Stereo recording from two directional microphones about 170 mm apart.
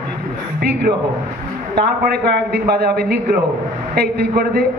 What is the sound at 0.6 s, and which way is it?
A man's voice, 70° right (ahead or behind).